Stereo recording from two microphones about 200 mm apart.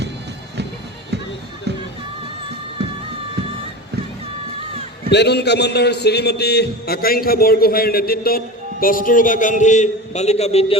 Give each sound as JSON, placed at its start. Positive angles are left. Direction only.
{"t": 1.7, "sound": "music", "side_deg": -55}
{"t": 5.1, "sound": "a man's voice", "side_deg": 55}